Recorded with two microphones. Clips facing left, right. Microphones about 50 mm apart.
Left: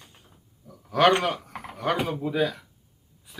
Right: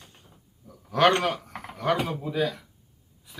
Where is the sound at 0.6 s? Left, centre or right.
Centre.